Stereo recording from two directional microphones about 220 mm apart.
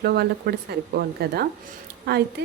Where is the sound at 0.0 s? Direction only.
45° right (ahead or behind).